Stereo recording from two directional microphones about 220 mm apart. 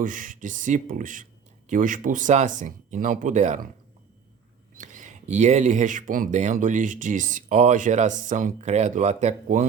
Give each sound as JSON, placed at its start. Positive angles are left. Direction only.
{"t": 0.0, "sound": "speech", "side_deg": -35}
{"t": 4.8, "sound": "speech", "side_deg": -35}